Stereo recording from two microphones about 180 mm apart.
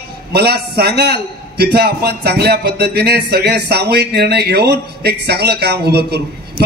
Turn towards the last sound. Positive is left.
turn(degrees=-60)  # may be behind; listen again after turning